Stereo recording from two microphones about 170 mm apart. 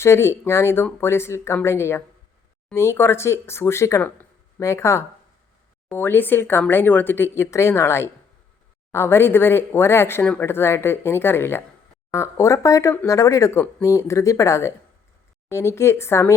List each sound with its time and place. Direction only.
0.0 s speech: 15° left (ahead or behind)